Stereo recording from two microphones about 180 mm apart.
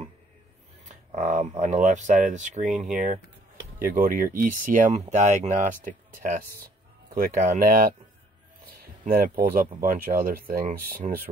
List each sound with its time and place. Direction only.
0.8 s speech: 45° right (ahead or behind)
9.0 s speech: 50° right (ahead or behind)